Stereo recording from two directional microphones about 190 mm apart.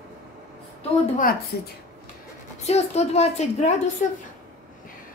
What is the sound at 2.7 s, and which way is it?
A woman's voice, 35° left (ahead or behind).